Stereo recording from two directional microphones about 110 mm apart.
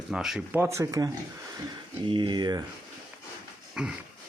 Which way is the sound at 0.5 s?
25° right (ahead or behind).